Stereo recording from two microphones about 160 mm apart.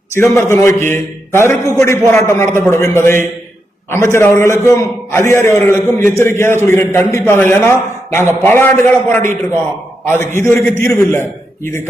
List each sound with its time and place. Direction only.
0.2 s a man's voice: 15° left (ahead or behind)